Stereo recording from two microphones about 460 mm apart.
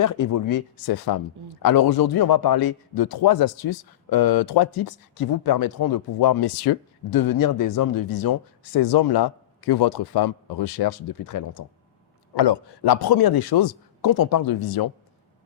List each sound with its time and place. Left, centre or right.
0.0 s speech: left
12.3 s speech: left